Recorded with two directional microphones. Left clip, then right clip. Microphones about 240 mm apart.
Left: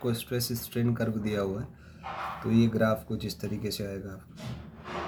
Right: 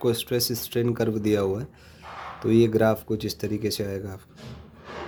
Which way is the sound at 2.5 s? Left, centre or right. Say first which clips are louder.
Right 7 dB; right.